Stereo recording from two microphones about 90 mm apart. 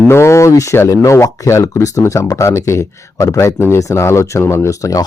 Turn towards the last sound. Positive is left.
turn(degrees=40)  # may be behind; listen again after turning